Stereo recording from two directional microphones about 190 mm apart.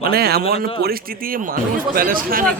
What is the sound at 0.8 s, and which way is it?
Speech, 50° right (ahead or behind).